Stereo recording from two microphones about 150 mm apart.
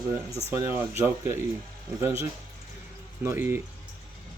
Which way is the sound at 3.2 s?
15° right (ahead or behind).